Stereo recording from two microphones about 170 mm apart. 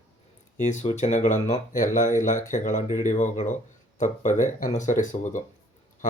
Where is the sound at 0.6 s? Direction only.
45° left (ahead or behind).